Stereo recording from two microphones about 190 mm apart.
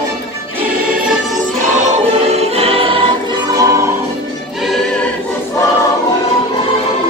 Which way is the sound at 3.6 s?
15° right (ahead or behind).